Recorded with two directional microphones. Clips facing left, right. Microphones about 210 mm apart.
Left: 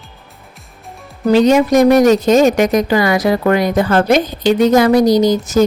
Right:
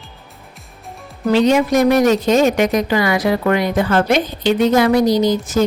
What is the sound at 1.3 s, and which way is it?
A woman's voice, 45° left (ahead or behind).